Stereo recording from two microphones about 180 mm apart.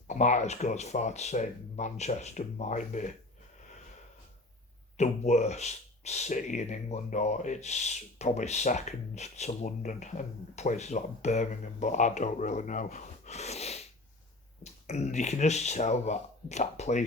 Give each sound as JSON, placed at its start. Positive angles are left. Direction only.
{"t": 0.1, "sound": "speech", "side_deg": 40}
{"t": 3.6, "sound": "a sound", "side_deg": 40}
{"t": 4.9, "sound": "speech", "side_deg": 40}